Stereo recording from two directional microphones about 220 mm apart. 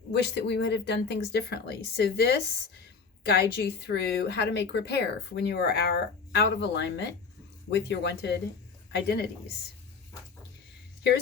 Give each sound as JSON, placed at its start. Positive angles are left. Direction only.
{"t": 0.1, "sound": "a woman's voice", "side_deg": 50}